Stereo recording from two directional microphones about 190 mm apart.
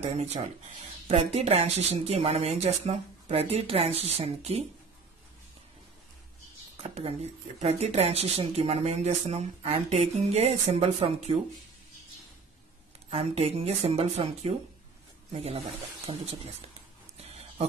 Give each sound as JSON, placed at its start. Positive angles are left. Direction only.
{"t": 0.0, "sound": "speech", "side_deg": -35}
{"t": 6.8, "sound": "speech", "side_deg": -30}
{"t": 13.1, "sound": "speech", "side_deg": -35}